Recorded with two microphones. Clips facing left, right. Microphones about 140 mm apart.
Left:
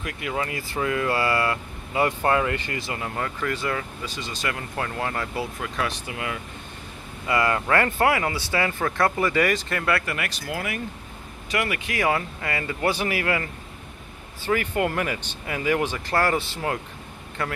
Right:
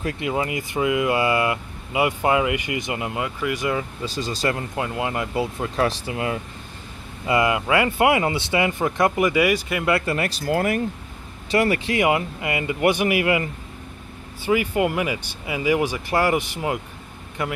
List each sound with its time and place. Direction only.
0.0 s speech: 20° right (ahead or behind)
4.0 s speech: 35° right (ahead or behind)
4.7 s speech: 15° right (ahead or behind)
5.8 s speech: 35° right (ahead or behind)
7.2 s speech: 15° right (ahead or behind); by 10.8 s 45° right (ahead or behind)
11.5 s speech: 30° right (ahead or behind)
12.0 s speech: 20° right (ahead or behind)